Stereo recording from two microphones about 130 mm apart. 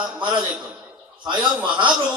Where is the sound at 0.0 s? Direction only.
35° right (ahead or behind).